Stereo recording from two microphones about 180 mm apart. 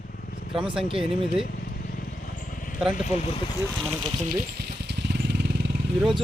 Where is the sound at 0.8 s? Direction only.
30° right (ahead or behind).